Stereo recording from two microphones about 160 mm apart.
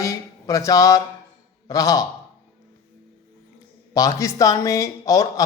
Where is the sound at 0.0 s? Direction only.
20° left (ahead or behind).